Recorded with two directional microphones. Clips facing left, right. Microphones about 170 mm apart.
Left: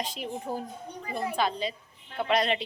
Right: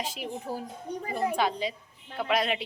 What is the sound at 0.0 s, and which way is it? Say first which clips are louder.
Speech: even; 5° right (ahead or behind).